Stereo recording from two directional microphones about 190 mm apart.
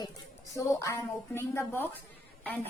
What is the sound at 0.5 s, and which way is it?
A woman's voice, 15° left (ahead or behind).